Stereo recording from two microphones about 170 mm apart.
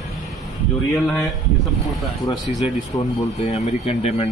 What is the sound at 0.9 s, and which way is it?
Speech, centre (ahead or behind).